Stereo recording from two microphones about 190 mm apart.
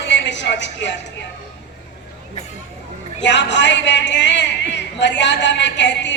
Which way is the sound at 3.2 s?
70° left (ahead or behind).